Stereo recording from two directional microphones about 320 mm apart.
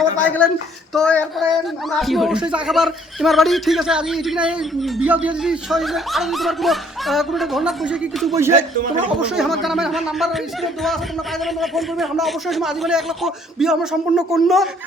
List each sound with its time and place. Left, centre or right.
0.4 s speech: centre
8.4 s speech: right
9.2 s speech: centre